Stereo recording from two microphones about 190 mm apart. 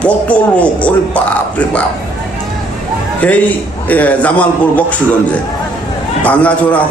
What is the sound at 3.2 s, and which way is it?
A man's voice, 5° left (ahead or behind).